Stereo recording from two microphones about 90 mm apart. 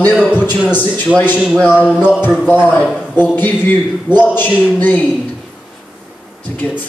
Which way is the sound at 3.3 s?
20° left (ahead or behind).